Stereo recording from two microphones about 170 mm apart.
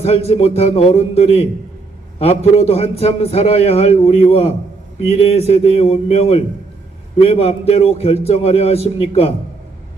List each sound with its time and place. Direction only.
0.0 s a man's voice: 40° left (ahead or behind)